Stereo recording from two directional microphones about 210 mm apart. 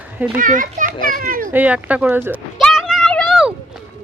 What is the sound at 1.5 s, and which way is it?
Speech, 5° right (ahead or behind).